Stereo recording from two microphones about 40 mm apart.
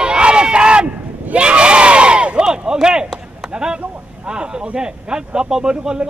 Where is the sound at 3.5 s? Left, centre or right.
Centre.